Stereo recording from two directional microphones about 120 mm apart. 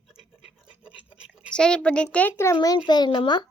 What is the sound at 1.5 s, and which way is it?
A child's voice, 5° left (ahead or behind).